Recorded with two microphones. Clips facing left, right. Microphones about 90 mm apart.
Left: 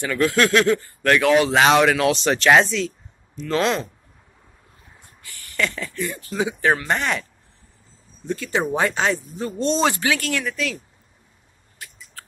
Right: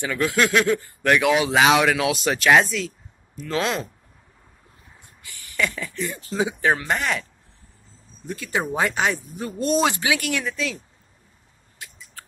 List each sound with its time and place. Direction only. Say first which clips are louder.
0.0 s speech: left 2 dB; 15° right (ahead or behind)
5.0 s a sound: left 1 dB; 20° right (ahead or behind)
6.0 s speech: even; 20° right (ahead or behind)
6.9 s speech: left 1 dB; centre (ahead or behind)
8.3 s speech: left 3 dB; 10° right (ahead or behind); by 10.8 s 25° right (ahead or behind)